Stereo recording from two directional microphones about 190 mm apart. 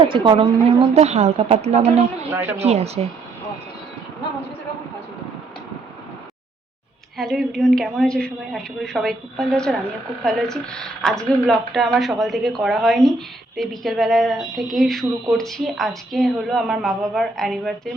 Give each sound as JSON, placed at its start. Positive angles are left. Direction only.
{"t": 0.0, "sound": "a woman's voice", "side_deg": -25}
{"t": 7.2, "sound": "speech", "side_deg": 0}